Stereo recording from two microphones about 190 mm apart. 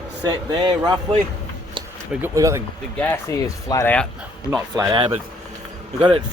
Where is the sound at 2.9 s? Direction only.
10° left (ahead or behind).